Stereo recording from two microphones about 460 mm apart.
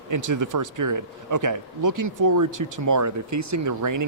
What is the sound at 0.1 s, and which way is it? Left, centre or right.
Speech, right.